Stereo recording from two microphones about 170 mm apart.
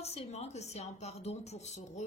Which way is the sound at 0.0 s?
40° left (ahead or behind).